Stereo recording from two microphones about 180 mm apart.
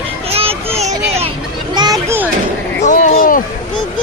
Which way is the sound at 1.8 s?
20° right (ahead or behind).